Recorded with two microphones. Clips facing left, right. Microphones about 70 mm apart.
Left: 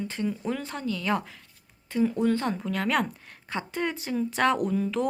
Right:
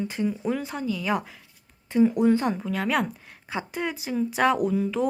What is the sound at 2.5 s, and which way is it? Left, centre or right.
Speech, centre.